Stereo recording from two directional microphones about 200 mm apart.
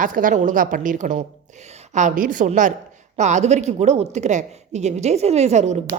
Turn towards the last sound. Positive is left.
turn(degrees=-35)  # may be behind; listen again after turning